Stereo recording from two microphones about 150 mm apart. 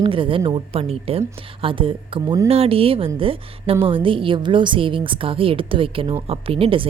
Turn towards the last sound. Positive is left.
turn(degrees=-40)  # may be behind; listen again after turning